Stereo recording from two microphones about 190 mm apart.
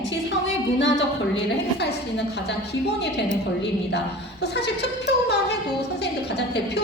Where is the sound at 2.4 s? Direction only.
60° left (ahead or behind).